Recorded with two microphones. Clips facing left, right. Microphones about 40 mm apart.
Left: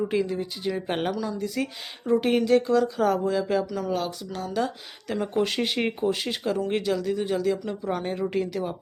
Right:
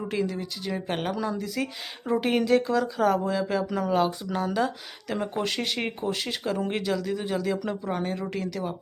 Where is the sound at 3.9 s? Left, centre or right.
Centre.